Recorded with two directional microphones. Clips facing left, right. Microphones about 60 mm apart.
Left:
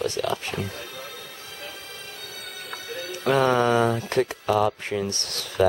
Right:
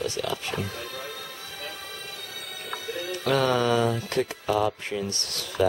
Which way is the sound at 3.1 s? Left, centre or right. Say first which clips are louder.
Left 3 dB; centre.